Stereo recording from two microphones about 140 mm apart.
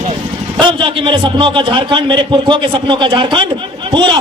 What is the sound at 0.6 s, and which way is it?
A man's voice, 35° right (ahead or behind).